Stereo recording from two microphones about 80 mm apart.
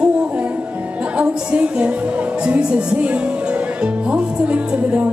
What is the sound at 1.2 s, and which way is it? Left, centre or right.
Music, centre.